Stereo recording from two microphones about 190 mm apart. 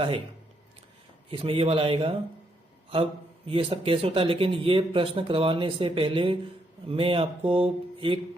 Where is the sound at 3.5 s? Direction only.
30° right (ahead or behind).